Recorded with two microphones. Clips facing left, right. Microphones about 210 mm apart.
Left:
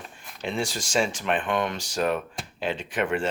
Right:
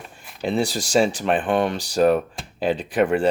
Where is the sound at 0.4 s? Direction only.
35° right (ahead or behind).